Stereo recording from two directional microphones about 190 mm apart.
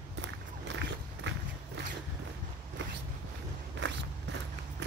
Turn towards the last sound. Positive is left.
turn(degrees=-70)  # may be behind; listen again after turning